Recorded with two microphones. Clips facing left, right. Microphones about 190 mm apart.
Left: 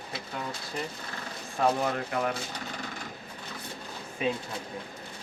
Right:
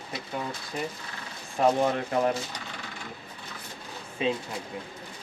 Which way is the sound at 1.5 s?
25° right (ahead or behind).